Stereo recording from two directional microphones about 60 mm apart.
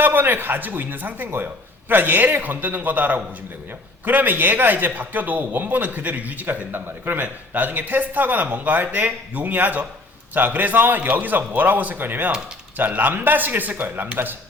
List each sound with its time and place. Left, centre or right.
0.0 s a man's voice: right